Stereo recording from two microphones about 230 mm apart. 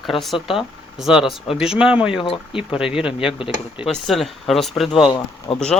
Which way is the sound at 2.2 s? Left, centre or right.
Left.